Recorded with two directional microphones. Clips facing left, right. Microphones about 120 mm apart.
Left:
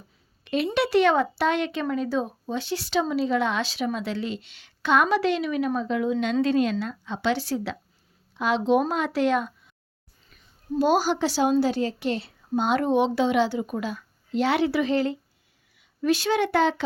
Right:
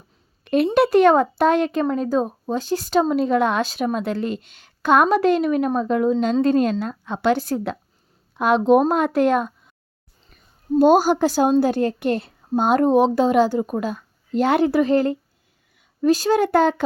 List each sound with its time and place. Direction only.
0.4 s a woman's voice: 45° right (ahead or behind)